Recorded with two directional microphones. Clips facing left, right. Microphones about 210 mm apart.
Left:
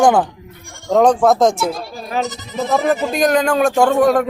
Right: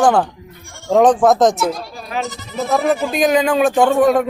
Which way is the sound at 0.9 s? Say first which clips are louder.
Right 1 dB; centre (ahead or behind).